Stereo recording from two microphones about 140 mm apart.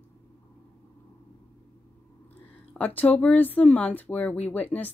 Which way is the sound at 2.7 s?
10° left (ahead or behind).